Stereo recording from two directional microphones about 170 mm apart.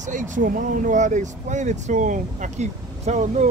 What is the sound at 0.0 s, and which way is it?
Speech, 45° right (ahead or behind).